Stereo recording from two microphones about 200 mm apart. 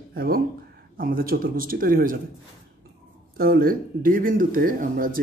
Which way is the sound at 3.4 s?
50° right (ahead or behind).